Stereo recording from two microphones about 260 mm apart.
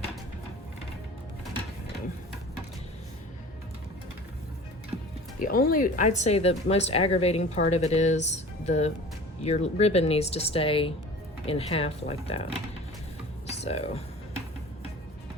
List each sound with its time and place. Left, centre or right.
5.4 s speech: left